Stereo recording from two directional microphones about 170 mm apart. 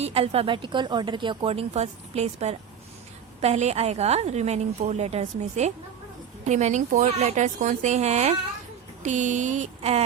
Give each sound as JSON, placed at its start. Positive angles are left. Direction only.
{"t": 0.0, "sound": "speech", "side_deg": -35}